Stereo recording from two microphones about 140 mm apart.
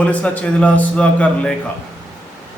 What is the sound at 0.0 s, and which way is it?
A man's voice, 10° left (ahead or behind).